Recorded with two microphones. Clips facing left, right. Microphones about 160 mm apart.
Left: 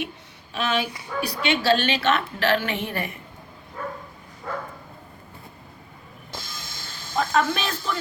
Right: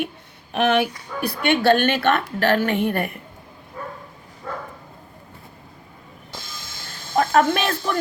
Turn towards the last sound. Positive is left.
turn(degrees=-60)  # may be behind; listen again after turning